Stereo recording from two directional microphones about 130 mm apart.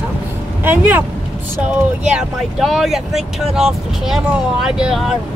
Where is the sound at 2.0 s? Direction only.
5° right (ahead or behind).